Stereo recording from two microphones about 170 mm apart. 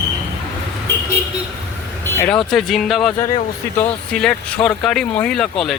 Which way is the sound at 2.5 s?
Centre (ahead or behind).